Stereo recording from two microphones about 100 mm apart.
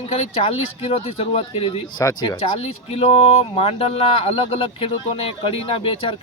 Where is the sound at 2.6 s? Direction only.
80° left.